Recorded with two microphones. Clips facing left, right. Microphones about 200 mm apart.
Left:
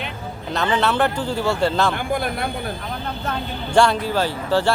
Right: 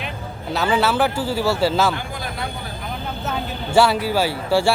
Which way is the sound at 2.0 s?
55° left (ahead or behind).